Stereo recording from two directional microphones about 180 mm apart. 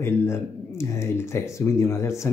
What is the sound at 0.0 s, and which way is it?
Speech, 15° left (ahead or behind).